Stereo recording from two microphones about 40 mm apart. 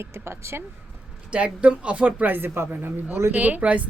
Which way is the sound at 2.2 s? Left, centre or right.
Right.